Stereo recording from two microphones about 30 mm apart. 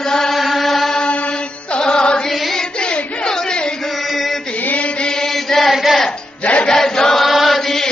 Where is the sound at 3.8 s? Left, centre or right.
Centre.